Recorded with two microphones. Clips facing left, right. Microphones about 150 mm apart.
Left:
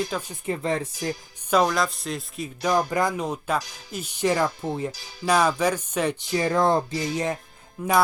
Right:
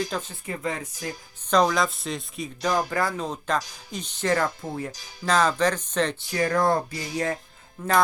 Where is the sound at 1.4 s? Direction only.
10° left (ahead or behind).